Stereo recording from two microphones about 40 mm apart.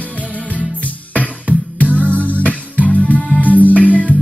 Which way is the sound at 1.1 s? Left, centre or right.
Left.